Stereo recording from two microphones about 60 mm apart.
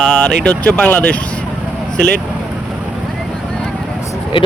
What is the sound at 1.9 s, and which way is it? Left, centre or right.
Speech, centre.